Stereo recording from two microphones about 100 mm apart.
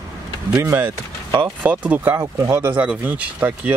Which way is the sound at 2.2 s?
30° right (ahead or behind).